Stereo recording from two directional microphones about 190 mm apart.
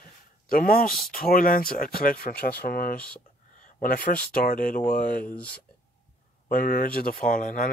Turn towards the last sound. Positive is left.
turn(degrees=45)  # may be behind; listen again after turning